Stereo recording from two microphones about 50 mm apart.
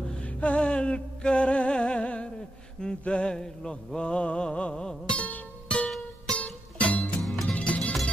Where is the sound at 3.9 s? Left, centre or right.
Left.